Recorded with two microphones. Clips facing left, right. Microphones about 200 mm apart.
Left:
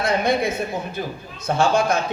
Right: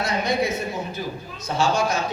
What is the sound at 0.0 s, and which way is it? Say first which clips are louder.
A man's voice: left 3 dB; 55° left (ahead or behind).